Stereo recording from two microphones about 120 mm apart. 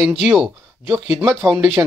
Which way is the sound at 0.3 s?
Centre (ahead or behind).